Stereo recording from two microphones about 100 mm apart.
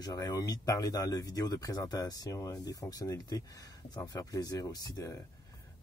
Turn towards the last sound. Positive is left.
turn(degrees=30)  # may be behind; listen again after turning